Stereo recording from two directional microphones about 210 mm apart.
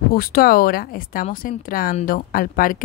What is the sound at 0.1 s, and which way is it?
Speech, 45° left (ahead or behind).